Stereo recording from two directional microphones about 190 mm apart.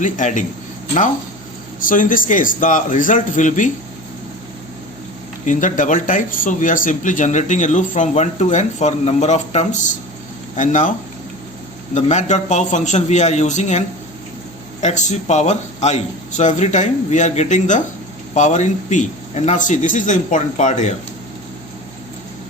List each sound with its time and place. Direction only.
0.0 s speech: 40° left (ahead or behind)
1.8 s a man's voice: 45° left (ahead or behind)
5.5 s speech: 45° left (ahead or behind)
11.9 s speech: 40° left (ahead or behind)